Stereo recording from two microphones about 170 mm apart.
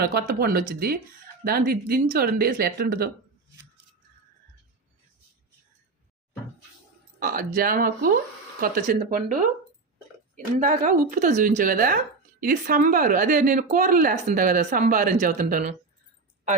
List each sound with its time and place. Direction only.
0.0 s speech: 65° right (ahead or behind)
7.2 s speech: 55° right (ahead or behind)